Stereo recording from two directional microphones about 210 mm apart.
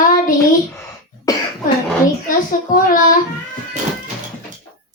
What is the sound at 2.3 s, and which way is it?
Speech, 40° left (ahead or behind).